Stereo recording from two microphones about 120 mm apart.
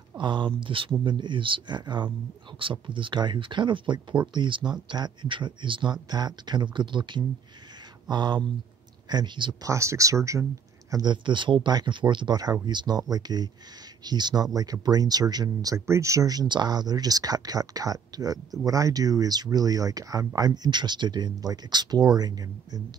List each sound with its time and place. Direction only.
0.2 s speech: 40° right (ahead or behind)
9.7 s speech: 25° right (ahead or behind)
10.9 s speech: 35° right (ahead or behind)